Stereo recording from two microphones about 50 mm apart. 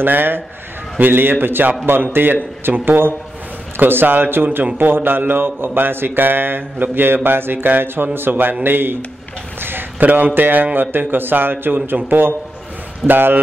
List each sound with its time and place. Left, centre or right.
0.0 s mantra: right
2.7 s mantra: right
9.6 s a man's voice: right
11.6 s mantra: right
13.0 s a man's voice: right